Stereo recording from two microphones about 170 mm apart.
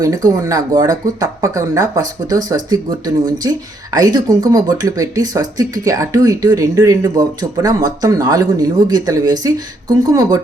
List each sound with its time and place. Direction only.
0.0 s speech: 20° right (ahead or behind)